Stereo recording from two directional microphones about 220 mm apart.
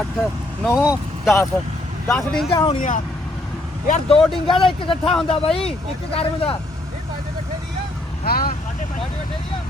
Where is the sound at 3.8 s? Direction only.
30° left (ahead or behind).